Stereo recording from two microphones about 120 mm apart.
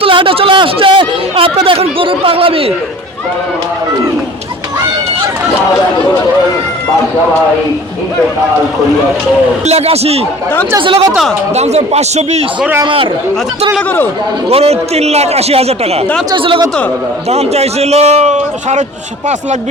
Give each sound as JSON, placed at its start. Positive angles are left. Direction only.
{"t": 0.0, "sound": "speech", "side_deg": -45}
{"t": 9.6, "sound": "a man's voice", "side_deg": -60}
{"t": 10.8, "sound": "speech", "side_deg": -45}
{"t": 11.5, "sound": "a man's voice", "side_deg": -65}
{"t": 12.8, "sound": "speech", "side_deg": -45}
{"t": 14.5, "sound": "a man's voice", "side_deg": -60}
{"t": 16.3, "sound": "speech", "side_deg": -45}
{"t": 17.2, "sound": "a man's voice", "side_deg": -60}